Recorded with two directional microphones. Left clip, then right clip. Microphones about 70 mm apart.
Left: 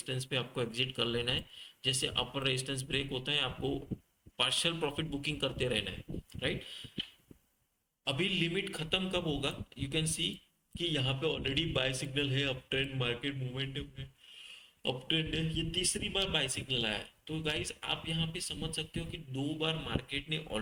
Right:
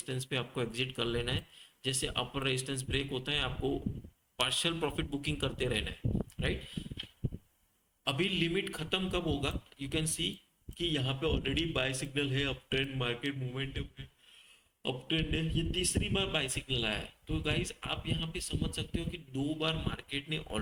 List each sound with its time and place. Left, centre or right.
0.0 s a man's voice: right
8.0 s a man's voice: right
14.8 s a man's voice: right